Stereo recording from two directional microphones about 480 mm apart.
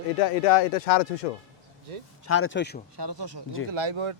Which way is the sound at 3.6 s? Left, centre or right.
Right.